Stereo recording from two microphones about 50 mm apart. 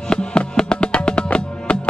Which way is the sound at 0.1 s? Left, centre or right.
Centre.